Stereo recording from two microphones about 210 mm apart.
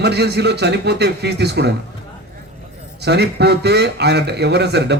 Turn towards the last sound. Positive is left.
turn(degrees=-50)  # may be behind; listen again after turning